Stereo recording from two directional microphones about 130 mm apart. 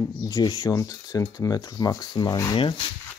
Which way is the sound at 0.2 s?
30° left (ahead or behind).